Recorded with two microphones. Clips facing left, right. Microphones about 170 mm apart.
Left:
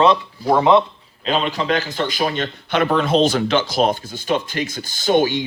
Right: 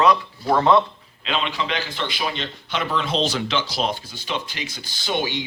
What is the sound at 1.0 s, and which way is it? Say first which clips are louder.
A man's voice: left 5 dB; 40° left (ahead or behind).